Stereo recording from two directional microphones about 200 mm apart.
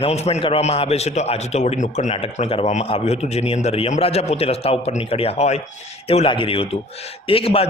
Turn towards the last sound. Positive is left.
turn(degrees=30)  # may be behind; listen again after turning